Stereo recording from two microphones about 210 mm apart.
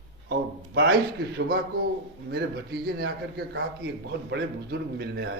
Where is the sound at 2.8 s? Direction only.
50° right (ahead or behind).